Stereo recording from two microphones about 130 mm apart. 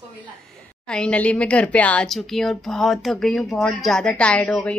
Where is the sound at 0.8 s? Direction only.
5° left (ahead or behind).